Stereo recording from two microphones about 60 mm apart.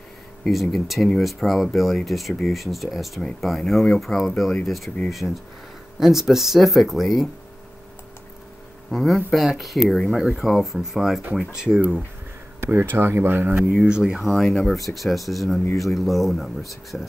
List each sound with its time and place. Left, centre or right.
0.5 s speech: centre
5.2 s speech: centre
8.9 s speech: centre
12.5 s speech: right
13.6 s speech: centre
14.2 s speech: centre